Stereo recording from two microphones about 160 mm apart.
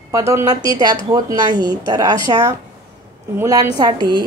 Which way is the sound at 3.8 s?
25° right (ahead or behind).